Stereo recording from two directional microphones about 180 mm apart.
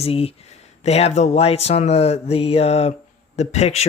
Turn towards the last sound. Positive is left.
turn(degrees=35)  # may be behind; listen again after turning